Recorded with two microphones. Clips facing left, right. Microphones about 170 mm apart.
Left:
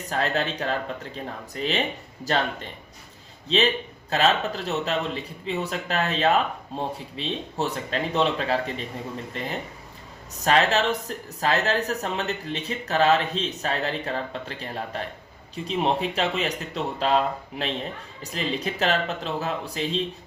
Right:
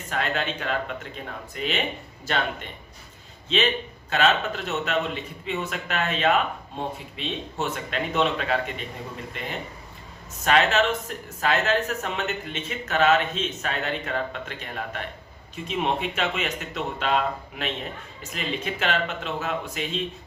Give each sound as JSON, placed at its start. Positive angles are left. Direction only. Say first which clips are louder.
{"t": 0.1, "sound": "speech", "louder": "left 2 dB", "side_deg": 35}